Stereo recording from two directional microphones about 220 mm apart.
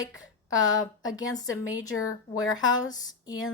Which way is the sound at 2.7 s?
20° left (ahead or behind).